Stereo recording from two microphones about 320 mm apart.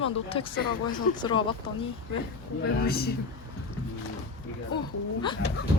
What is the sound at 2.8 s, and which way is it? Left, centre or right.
Speech, left.